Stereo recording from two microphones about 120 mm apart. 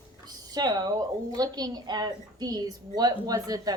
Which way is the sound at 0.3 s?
35° right (ahead or behind).